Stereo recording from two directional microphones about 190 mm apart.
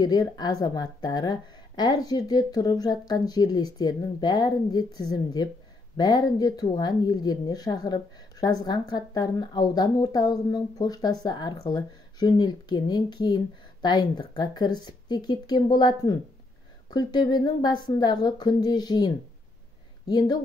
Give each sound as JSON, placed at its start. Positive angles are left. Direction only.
{"t": 0.0, "sound": "speech", "side_deg": 20}